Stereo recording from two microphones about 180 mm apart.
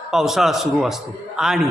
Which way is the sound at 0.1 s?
Centre (ahead or behind).